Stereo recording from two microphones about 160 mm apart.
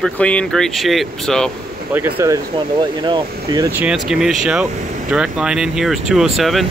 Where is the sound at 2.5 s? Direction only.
30° right (ahead or behind).